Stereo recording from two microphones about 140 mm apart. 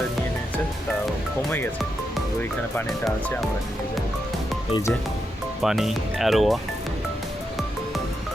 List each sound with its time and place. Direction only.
1.5 s speech: 15° left (ahead or behind)
4.7 s music: 20° left (ahead or behind)
5.6 s speech: centre (ahead or behind)